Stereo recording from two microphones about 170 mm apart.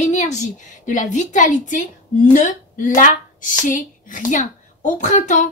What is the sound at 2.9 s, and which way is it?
A woman's voice, 50° left (ahead or behind).